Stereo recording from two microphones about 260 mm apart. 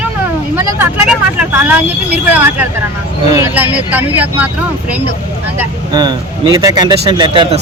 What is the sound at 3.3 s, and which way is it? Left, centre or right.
Speech, centre.